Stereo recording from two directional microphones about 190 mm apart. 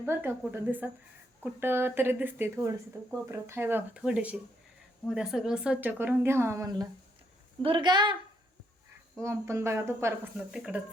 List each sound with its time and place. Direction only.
0.0 s a woman's voice: 10° right (ahead or behind)
9.2 s speech: 15° right (ahead or behind)